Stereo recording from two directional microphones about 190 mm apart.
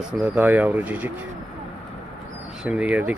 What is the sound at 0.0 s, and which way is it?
Speech, 5° right (ahead or behind).